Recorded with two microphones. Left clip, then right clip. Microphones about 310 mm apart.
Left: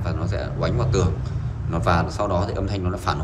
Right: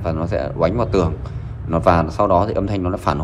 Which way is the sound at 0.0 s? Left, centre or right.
Centre.